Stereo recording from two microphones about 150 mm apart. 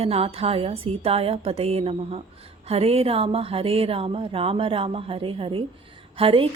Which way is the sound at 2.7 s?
40° right (ahead or behind).